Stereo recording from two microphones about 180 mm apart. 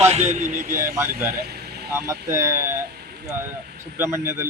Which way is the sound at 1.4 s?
65° right (ahead or behind).